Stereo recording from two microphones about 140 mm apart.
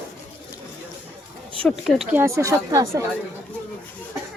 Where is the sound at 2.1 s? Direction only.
20° right (ahead or behind).